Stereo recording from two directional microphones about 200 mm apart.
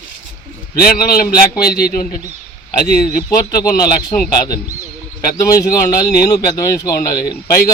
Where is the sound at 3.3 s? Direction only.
15° left (ahead or behind).